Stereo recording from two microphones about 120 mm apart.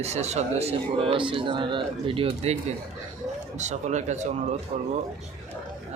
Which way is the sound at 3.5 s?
80° right.